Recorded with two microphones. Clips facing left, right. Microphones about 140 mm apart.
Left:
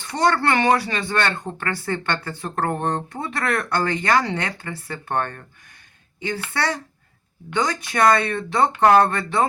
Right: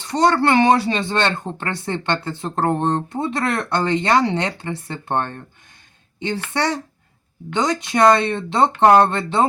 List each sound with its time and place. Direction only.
0.0 s speech: 20° right (ahead or behind)